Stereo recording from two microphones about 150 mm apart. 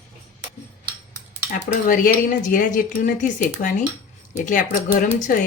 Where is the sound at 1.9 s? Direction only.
65° left (ahead or behind).